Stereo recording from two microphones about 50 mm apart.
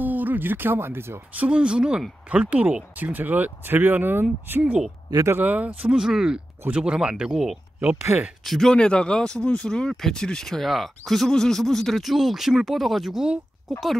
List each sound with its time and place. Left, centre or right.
0.0 s speech: right
1.3 s speech: right
5.9 s speech: centre
8.1 s speech: right
8.5 s speech: centre
8.7 s speech: left; by 13.9 s centre